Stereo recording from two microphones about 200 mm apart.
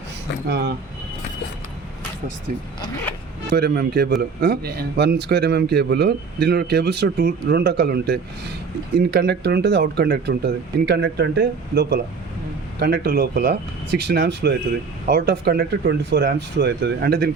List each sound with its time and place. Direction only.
0.4 s speech: 55° right (ahead or behind)
3.5 s speech: 55° right (ahead or behind)